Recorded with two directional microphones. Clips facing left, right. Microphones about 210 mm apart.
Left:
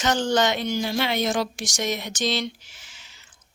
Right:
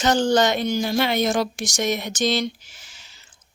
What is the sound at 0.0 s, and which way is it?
A woman's voice, 35° right (ahead or behind).